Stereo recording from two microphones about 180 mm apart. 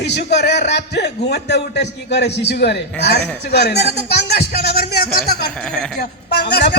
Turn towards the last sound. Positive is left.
turn(degrees=65)  # may be behind; listen again after turning